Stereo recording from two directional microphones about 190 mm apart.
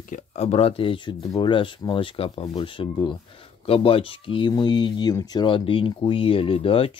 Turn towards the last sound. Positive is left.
turn(degrees=30)  # may be behind; listen again after turning